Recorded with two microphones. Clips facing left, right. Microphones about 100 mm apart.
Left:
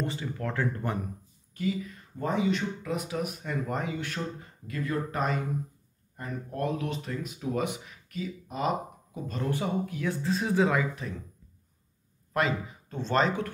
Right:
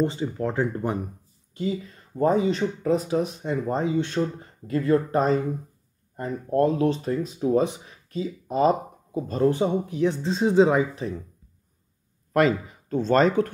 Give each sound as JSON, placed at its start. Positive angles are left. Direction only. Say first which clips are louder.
{"t": 0.0, "sound": "speech", "louder": "right 8 dB", "side_deg": -25}
{"t": 12.3, "sound": "speech", "louder": "right 8 dB", "side_deg": -45}